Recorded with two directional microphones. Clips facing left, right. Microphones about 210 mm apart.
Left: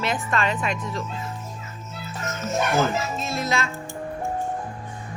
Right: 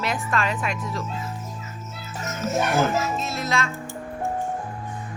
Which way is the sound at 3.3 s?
Centre (ahead or behind).